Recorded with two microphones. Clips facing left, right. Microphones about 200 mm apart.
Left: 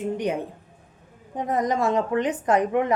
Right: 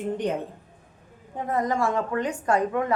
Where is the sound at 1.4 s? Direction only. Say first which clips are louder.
Left 2 dB; 20° left (ahead or behind).